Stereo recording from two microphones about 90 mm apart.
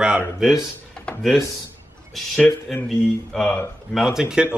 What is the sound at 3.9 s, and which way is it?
Speech, 5° right (ahead or behind).